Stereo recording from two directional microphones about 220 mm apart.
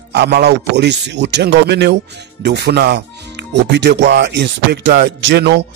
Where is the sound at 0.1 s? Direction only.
50° right (ahead or behind).